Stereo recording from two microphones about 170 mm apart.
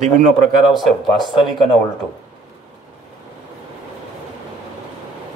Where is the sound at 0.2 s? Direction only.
50° right (ahead or behind).